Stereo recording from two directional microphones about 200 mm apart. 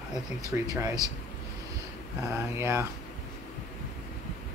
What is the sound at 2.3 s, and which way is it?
Speech, 15° right (ahead or behind).